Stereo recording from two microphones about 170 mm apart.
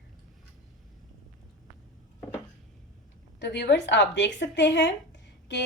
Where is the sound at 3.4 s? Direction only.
85° left.